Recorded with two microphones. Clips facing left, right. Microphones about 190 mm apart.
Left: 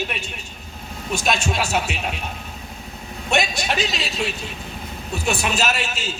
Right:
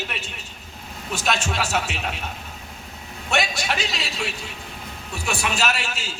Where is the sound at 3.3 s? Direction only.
15° left (ahead or behind).